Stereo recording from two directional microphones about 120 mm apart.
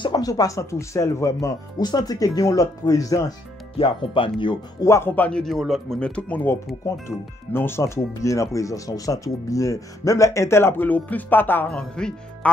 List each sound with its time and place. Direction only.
0.0 s speech: 35° left (ahead or behind)
3.7 s speech: 45° left (ahead or behind)
4.8 s a man's voice: 20° left (ahead or behind)